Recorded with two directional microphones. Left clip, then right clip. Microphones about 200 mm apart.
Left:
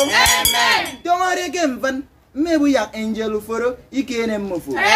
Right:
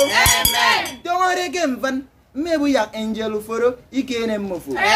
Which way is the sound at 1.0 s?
20° right (ahead or behind).